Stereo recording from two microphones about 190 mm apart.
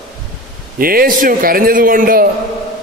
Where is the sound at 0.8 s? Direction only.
50° right (ahead or behind).